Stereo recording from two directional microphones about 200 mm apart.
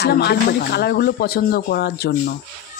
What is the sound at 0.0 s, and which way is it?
Speech, 55° left (ahead or behind).